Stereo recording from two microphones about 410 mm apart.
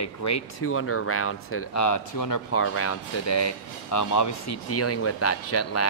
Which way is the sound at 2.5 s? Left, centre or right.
Left.